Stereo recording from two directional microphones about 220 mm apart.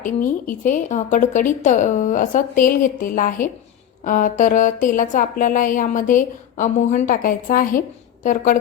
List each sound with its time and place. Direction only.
0.0 s speech: 35° left (ahead or behind)